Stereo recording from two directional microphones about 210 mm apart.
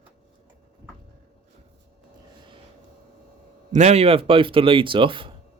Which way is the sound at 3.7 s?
30° right (ahead or behind).